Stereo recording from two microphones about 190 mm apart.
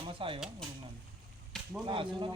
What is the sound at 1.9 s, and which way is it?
Speech, 25° right (ahead or behind).